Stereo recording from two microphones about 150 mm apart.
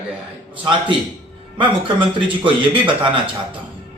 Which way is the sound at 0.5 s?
35° right (ahead or behind).